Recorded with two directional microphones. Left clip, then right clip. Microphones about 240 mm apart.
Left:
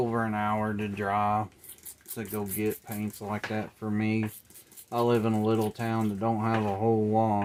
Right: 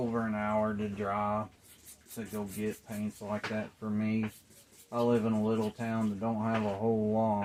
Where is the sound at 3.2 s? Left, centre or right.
Left.